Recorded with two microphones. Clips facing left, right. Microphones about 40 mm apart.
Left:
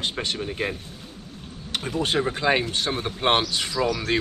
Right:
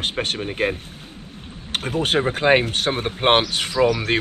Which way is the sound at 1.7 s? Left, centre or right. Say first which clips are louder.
Right 3 dB; right.